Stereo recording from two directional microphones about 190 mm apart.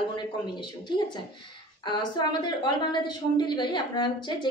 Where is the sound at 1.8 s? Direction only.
25° left (ahead or behind).